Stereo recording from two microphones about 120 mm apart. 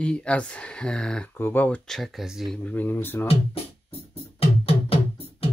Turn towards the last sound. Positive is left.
turn(degrees=55)  # may be behind; listen again after turning